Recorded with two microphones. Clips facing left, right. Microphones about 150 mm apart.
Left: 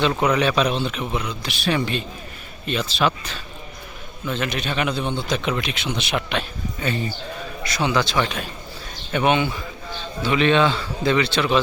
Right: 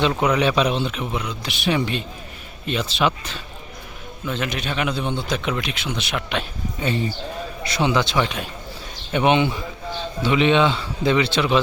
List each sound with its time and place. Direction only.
0.3 s speech: 20° right (ahead or behind); by 6.2 s centre (ahead or behind)
6.3 s speech: 20° right (ahead or behind)